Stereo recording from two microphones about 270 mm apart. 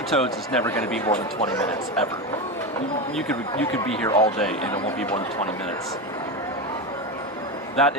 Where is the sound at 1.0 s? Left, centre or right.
Left.